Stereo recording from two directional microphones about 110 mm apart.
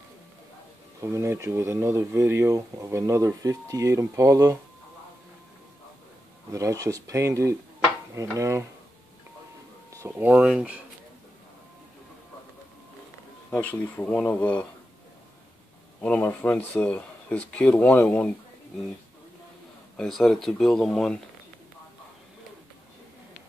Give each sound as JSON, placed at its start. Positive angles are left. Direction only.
{"t": 1.0, "sound": "speech", "side_deg": -25}
{"t": 6.5, "sound": "speech", "side_deg": -30}
{"t": 10.0, "sound": "speech", "side_deg": -15}
{"t": 13.5, "sound": "speech", "side_deg": 15}
{"t": 16.0, "sound": "speech", "side_deg": 10}
{"t": 20.0, "sound": "speech", "side_deg": 0}